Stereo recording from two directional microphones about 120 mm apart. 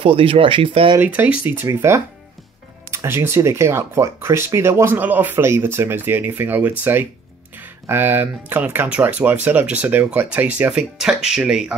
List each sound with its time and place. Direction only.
0.0 s speech: 50° right (ahead or behind)
0.9 s speech: 15° right (ahead or behind)